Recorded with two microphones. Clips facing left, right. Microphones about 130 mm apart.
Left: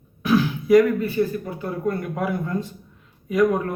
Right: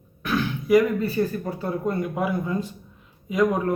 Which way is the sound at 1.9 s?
15° right (ahead or behind).